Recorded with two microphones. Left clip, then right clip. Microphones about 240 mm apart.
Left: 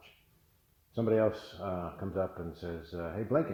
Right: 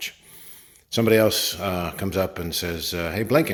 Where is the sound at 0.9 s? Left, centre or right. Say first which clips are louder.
Right 11 dB; right.